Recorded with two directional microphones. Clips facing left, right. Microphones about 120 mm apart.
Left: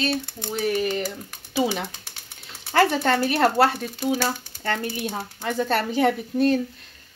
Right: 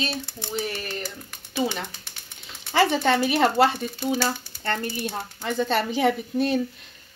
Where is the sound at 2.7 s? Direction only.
Centre (ahead or behind).